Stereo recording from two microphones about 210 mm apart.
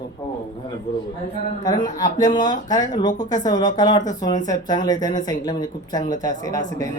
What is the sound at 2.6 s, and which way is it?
Speech, 20° left (ahead or behind).